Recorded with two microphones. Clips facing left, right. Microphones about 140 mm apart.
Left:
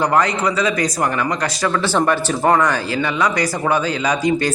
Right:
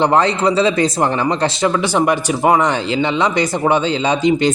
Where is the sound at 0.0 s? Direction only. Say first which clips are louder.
Right 3 dB; 25° right (ahead or behind).